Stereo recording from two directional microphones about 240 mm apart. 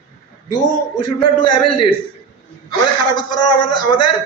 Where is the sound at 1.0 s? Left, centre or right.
Left.